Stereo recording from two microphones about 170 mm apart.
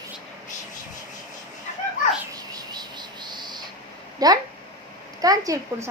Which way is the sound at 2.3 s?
25° right (ahead or behind).